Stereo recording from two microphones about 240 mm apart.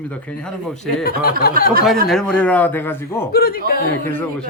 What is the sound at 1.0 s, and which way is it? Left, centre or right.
Speech, left.